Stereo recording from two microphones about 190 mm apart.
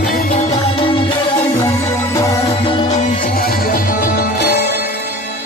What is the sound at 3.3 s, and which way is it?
Music, 50° left (ahead or behind).